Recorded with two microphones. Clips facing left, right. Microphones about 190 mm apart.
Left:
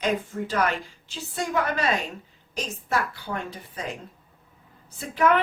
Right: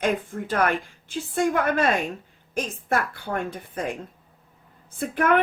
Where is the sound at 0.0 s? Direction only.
50° right (ahead or behind).